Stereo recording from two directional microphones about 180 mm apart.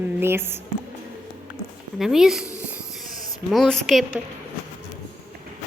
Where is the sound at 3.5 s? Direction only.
Centre (ahead or behind).